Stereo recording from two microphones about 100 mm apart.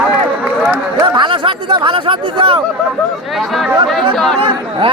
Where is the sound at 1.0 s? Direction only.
55° right (ahead or behind).